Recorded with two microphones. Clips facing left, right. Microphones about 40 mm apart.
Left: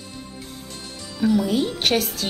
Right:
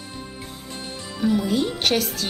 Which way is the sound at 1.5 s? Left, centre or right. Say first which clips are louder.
Left 1 dB; centre.